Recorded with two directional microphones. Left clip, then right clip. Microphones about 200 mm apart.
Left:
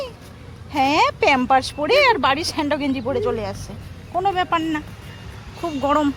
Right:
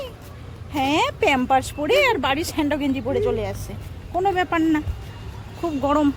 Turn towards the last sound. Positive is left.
turn(degrees=0)  # may be behind; listen again after turning